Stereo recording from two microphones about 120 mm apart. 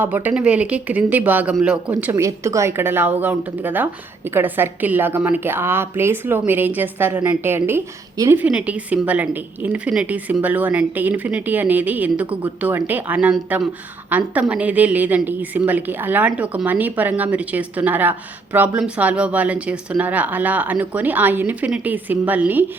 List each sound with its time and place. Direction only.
0.0 s a woman's voice: 15° right (ahead or behind)
2.1 s a woman's voice: 25° right (ahead or behind)